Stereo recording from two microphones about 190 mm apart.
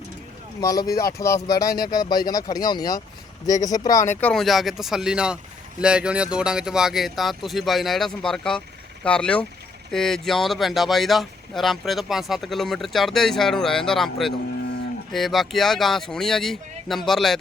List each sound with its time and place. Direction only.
0.6 s speech: 20° left (ahead or behind)
4.2 s speech: 5° left (ahead or behind)